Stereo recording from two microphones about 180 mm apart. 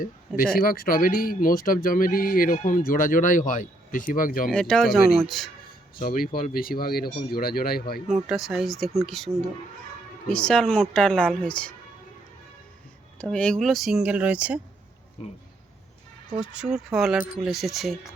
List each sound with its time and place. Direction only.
0.0 s speech: 55° left (ahead or behind)
4.5 s speech: 5° left (ahead or behind)
5.6 s speech: 55° left (ahead or behind)
8.0 s speech: 5° right (ahead or behind)
13.1 s speech: 5° left (ahead or behind)
15.2 s speech: 35° left (ahead or behind)
16.4 s speech: 5° right (ahead or behind)